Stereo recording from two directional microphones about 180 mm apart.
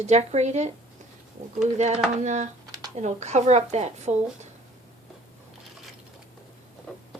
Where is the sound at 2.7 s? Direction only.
20° right (ahead or behind).